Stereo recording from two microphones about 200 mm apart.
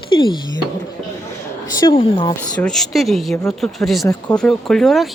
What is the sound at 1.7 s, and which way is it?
Speech, 20° left (ahead or behind).